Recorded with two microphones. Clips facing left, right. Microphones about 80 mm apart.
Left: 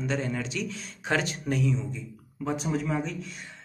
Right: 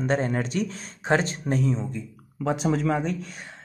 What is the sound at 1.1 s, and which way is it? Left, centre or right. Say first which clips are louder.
Speech: right 4 dB; right.